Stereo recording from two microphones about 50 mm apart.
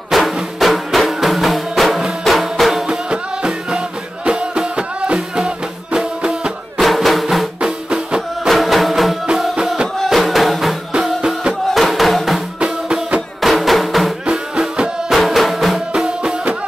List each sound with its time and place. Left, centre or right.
0.1 s music: centre
2.9 s music: centre
6.8 s music: centre
7.6 s music: right
8.5 s music: centre
12.5 s music: centre
13.4 s music: centre